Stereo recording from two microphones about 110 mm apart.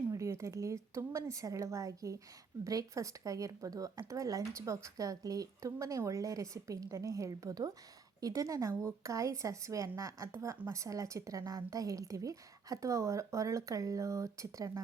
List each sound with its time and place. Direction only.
0.1 s speech: 25° right (ahead or behind)